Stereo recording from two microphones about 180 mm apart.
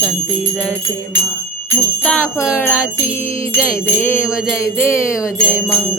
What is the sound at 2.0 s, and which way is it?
Bell, 10° left (ahead or behind).